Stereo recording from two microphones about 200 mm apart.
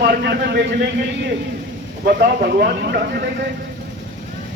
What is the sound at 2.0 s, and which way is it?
A man's voice, 50° right (ahead or behind).